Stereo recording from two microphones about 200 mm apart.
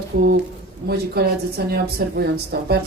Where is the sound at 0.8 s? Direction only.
50° right (ahead or behind).